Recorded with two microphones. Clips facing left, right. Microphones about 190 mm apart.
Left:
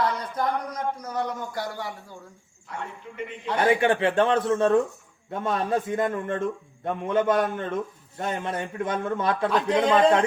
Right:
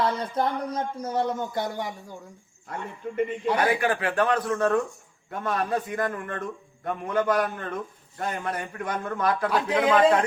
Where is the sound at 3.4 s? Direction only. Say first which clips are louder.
Left 3 dB; 10° right (ahead or behind).